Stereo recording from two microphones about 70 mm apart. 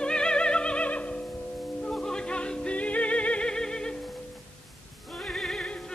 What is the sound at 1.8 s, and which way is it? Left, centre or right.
Music, centre.